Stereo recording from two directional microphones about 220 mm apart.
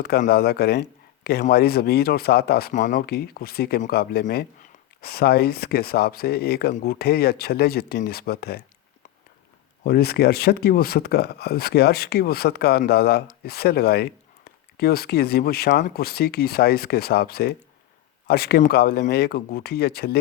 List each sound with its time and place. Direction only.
0.0 s speech: 45° left (ahead or behind)
9.8 s speech: 45° left (ahead or behind)